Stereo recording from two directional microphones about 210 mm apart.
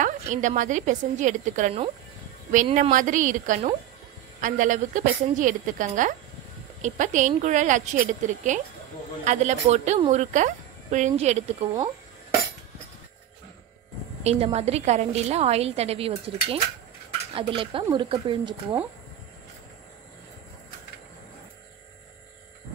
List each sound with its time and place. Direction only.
0.0 s a woman's voice: 35° right (ahead or behind)
14.2 s a woman's voice: 30° right (ahead or behind)